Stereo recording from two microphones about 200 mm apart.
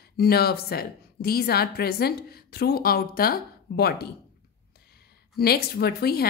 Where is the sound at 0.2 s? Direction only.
50° left (ahead or behind).